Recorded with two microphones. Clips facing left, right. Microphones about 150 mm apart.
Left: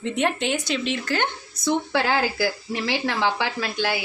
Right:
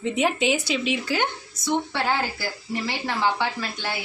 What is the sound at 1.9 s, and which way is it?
Speech, 90° left.